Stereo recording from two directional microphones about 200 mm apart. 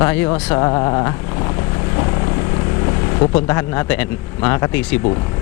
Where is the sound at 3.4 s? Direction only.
15° left (ahead or behind).